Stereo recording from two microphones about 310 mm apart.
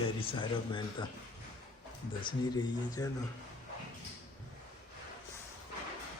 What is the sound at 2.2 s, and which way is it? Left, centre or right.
Music, centre.